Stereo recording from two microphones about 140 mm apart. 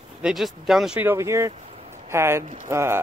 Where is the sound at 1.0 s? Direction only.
20° right (ahead or behind).